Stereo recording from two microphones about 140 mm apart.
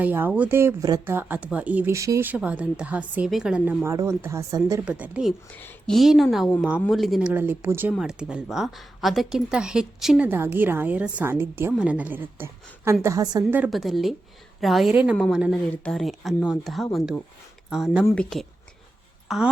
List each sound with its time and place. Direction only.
0.0 s speech: 15° right (ahead or behind)
3.8 s speech: 20° right (ahead or behind)
4.9 s speech: 10° right (ahead or behind)
5.5 s speech: 10° left (ahead or behind); by 7.9 s 15° right (ahead or behind)
7.9 s speech: 5° right (ahead or behind); by 13.4 s 25° right (ahead or behind)
13.7 s speech: centre (ahead or behind)
15.5 s a woman's voice: 10° left (ahead or behind)